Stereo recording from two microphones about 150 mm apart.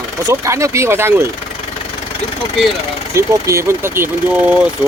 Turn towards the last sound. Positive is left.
turn(degrees=-10)  # may be behind; listen again after turning